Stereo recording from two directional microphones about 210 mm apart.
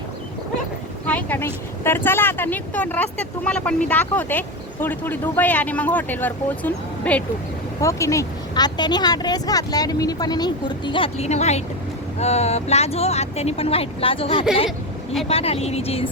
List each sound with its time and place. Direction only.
1.0 s speech: 10° left (ahead or behind); by 16.0 s 30° left (ahead or behind)